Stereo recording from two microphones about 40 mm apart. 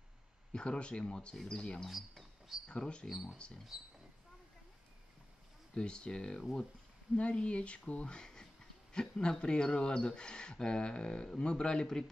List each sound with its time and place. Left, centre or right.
0.5 s speech: left
1.3 s speech: centre
1.9 s a sound: centre
2.7 s speech: left
3.1 s speech: centre
5.8 s speech: left
7.2 s speech: left